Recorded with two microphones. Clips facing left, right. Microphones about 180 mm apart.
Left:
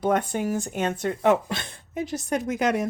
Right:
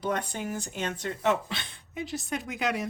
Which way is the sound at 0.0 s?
50° left (ahead or behind).